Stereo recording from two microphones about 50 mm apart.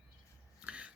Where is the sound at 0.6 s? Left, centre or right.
Right.